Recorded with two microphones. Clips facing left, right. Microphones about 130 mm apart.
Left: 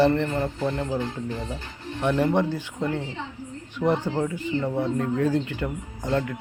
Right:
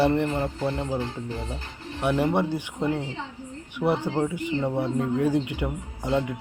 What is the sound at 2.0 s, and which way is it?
Speech, 10° right (ahead or behind).